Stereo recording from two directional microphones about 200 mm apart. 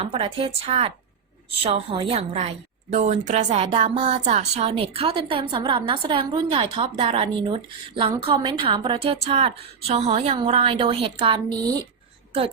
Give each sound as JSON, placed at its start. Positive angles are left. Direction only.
{"t": 0.0, "sound": "a woman's voice", "side_deg": -25}